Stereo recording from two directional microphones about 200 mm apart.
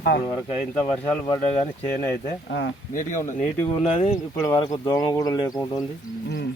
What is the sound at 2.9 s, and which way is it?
Speech, 40° left (ahead or behind).